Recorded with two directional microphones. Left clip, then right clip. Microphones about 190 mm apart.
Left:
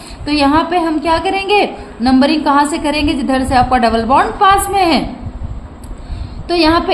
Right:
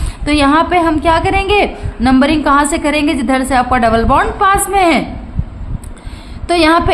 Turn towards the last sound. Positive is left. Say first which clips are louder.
# right 2 dB
turn(degrees=-25)  # may be behind; listen again after turning